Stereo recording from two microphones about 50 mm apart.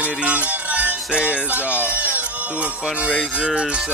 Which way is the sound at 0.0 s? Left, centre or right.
Right.